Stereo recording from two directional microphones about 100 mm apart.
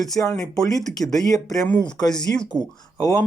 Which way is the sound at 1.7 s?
10° left (ahead or behind).